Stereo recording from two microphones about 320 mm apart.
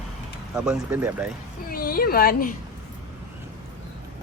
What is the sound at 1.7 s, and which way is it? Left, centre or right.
Speech, left.